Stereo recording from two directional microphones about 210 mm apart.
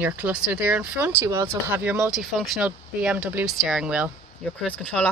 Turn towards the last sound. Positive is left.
turn(degrees=5)  # may be behind; listen again after turning